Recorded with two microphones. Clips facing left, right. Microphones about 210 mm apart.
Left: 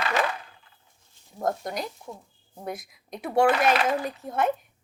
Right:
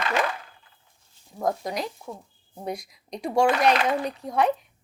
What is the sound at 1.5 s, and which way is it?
Speech, centre (ahead or behind).